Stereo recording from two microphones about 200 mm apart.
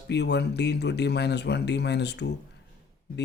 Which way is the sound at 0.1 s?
60° left (ahead or behind).